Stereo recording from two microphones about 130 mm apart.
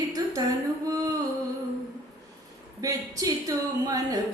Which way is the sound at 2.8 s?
25° right (ahead or behind).